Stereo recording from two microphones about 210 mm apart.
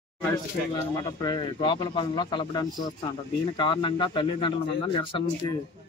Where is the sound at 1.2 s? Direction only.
20° left (ahead or behind).